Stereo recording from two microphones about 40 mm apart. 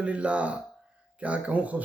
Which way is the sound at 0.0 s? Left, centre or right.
Right.